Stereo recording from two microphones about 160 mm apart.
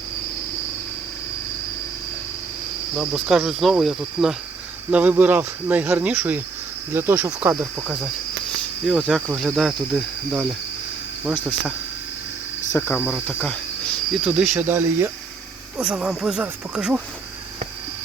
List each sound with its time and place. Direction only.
3.0 s speech: 5° right (ahead or behind); by 7.9 s 20° right (ahead or behind)
8.9 s speech: centre (ahead or behind)
12.7 s speech: 15° left (ahead or behind); by 14.6 s centre (ahead or behind)
14.7 s speech: 15° right (ahead or behind)